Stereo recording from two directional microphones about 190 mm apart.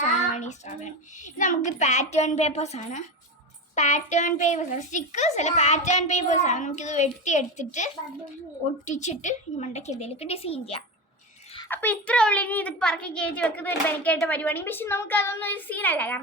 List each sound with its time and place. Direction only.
0.3 s a child's voice: 40° left (ahead or behind)
11.7 s a child's voice: 10° left (ahead or behind)